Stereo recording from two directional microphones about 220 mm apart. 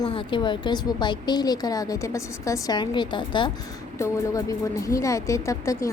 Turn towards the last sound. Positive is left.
turn(degrees=15)  # may be behind; listen again after turning